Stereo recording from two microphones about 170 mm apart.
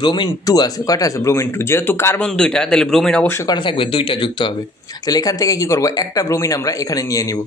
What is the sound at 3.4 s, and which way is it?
Speech, 30° left (ahead or behind).